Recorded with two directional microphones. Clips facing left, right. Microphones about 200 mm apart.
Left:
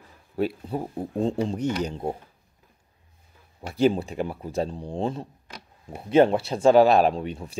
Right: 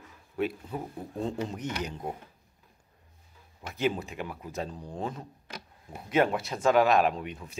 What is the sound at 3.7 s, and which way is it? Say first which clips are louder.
Speech: left 8 dB; 30° left (ahead or behind).